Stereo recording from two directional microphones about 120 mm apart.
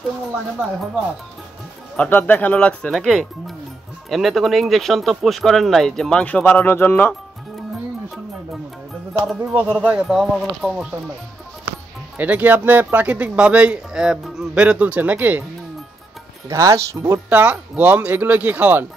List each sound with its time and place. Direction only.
2.0 s speech: 15° left (ahead or behind)
9.4 s speech: 15° right (ahead or behind)
12.2 s speech: 15° right (ahead or behind)
16.4 s speech: 25° right (ahead or behind)